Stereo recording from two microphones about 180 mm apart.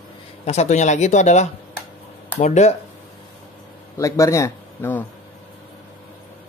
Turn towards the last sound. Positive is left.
turn(degrees=15)  # may be behind; listen again after turning